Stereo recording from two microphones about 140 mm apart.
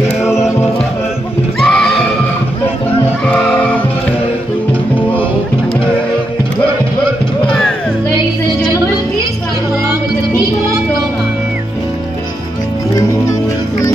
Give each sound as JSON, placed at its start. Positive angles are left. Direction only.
{"t": 0.3, "sound": "music", "side_deg": 20}
{"t": 1.6, "sound": "music", "side_deg": 0}
{"t": 7.4, "sound": "music", "side_deg": 5}